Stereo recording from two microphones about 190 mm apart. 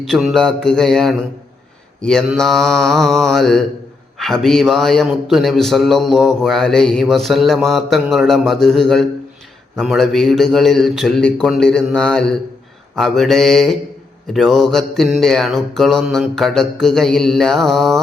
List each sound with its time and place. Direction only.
0.0 s a man's voice: centre (ahead or behind)